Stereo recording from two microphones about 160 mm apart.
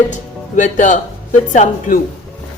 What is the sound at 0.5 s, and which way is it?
Speech, 55° left (ahead or behind).